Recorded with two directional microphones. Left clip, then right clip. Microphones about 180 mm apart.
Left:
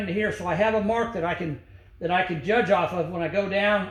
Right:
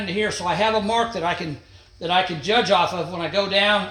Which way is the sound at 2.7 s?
25° right (ahead or behind).